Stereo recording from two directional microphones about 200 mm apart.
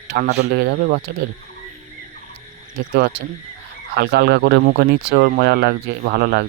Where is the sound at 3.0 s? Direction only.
55° right (ahead or behind).